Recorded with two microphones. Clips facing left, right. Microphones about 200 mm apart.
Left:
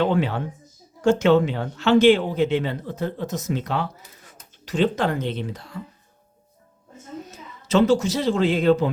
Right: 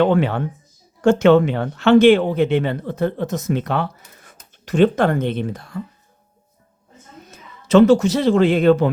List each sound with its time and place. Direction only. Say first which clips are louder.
0.0 s a man's voice: right 5 dB; 60° right (ahead or behind)
7.3 s a man's voice: right 8 dB; 55° right (ahead or behind)